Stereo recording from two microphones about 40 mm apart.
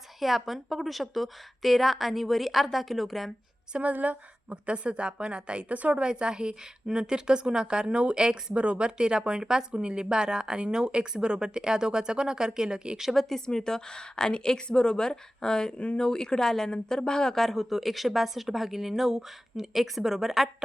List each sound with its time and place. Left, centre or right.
0.2 s speech: centre
3.8 s a woman's voice: right
5.6 s a woman's voice: right
6.0 s a woman's voice: right
13.0 s speech: centre
13.2 s a woman's voice: centre